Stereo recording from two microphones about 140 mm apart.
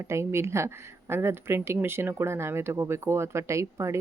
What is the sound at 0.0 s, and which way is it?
A woman's voice, 20° right (ahead or behind).